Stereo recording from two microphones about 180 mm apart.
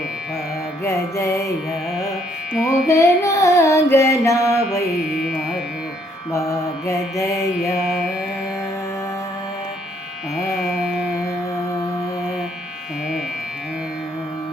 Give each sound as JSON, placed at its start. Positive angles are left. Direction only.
{"t": 0.9, "sound": "music", "side_deg": 15}
{"t": 2.6, "sound": "music", "side_deg": 15}
{"t": 6.3, "sound": "music", "side_deg": 15}
{"t": 7.8, "sound": "carnatic music", "side_deg": 0}
{"t": 10.5, "sound": "carnatic music", "side_deg": 0}